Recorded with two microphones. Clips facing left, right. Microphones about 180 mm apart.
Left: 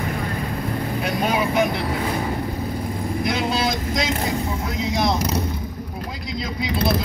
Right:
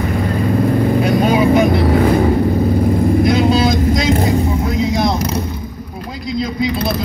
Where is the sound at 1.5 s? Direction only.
55° right (ahead or behind).